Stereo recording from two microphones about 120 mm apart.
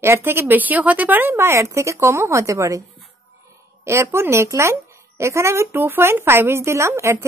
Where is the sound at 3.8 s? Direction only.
20° right (ahead or behind).